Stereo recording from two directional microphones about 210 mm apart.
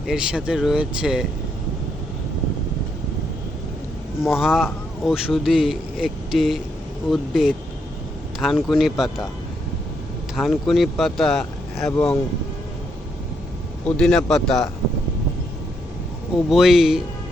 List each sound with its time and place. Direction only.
0.1 s speech: 5° right (ahead or behind)
4.4 s speech: centre (ahead or behind)
10.3 s speech: centre (ahead or behind)
13.9 s speech: 5° left (ahead or behind)
16.5 s speech: centre (ahead or behind)